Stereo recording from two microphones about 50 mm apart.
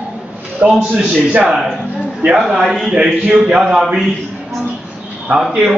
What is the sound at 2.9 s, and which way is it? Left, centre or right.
Speech, centre.